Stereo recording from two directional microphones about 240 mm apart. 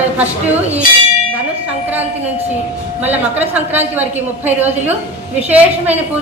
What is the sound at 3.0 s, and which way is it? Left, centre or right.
Speech, right.